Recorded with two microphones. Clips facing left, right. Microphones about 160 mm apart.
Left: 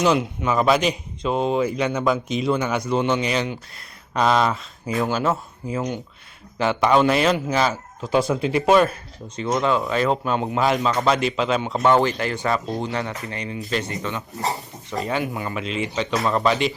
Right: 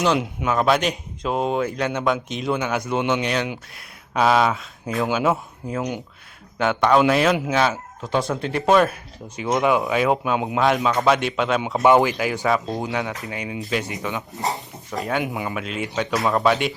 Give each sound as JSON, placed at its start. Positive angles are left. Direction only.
{"t": 0.0, "sound": "speech", "side_deg": 0}
{"t": 6.6, "sound": "speech", "side_deg": 0}
{"t": 9.3, "sound": "speech", "side_deg": -10}
{"t": 11.8, "sound": "speech", "side_deg": -15}
{"t": 15.2, "sound": "speech", "side_deg": -20}
{"t": 15.4, "sound": "speech", "side_deg": -5}